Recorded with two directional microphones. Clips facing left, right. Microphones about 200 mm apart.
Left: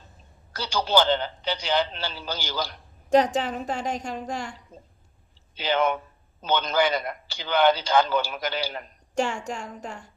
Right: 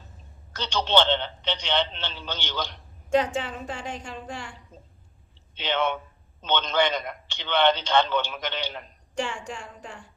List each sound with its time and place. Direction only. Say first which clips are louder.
0.5 s a man's voice: left 1 dB; 10° left (ahead or behind)
3.1 s a woman's voice: left 3 dB; 40° left (ahead or behind)
5.5 s a man's voice: left 3 dB; 5° left (ahead or behind)
9.1 s a woman's voice: left 4 dB; 40° left (ahead or behind)